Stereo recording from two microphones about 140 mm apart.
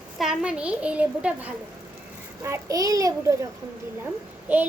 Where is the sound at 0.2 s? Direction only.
5° right (ahead or behind).